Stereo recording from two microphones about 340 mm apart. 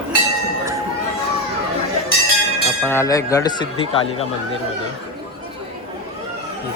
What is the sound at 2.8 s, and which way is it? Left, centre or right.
Speech, centre.